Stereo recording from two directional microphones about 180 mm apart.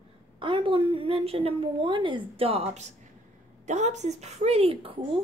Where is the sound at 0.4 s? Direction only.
30° right (ahead or behind).